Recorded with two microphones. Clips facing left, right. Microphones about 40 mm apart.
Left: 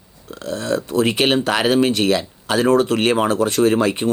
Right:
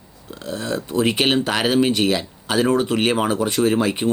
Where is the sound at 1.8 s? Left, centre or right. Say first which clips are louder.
Left 2 dB; centre.